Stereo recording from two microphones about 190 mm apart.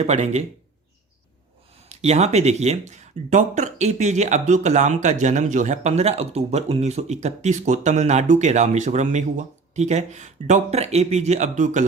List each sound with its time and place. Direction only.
0.0 s speech: 35° right (ahead or behind)
1.9 s speech: 35° right (ahead or behind)